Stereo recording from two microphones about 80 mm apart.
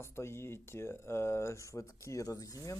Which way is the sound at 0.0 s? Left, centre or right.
Left.